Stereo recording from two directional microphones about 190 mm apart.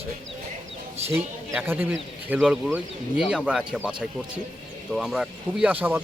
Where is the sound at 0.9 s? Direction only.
35° right (ahead or behind).